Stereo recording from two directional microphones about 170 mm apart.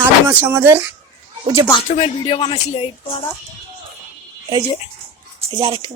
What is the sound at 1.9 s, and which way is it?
Speech, 35° left (ahead or behind).